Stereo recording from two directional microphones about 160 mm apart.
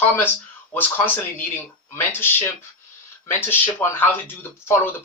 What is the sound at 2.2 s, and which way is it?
Speech, 15° left (ahead or behind).